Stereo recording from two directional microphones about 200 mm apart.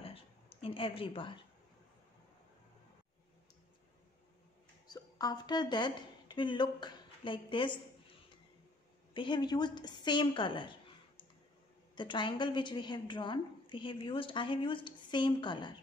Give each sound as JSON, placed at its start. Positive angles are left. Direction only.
{"t": 0.0, "sound": "a sound", "side_deg": 30}
{"t": 4.8, "sound": "a woman's voice", "side_deg": 20}
{"t": 9.1, "sound": "a woman's voice", "side_deg": 25}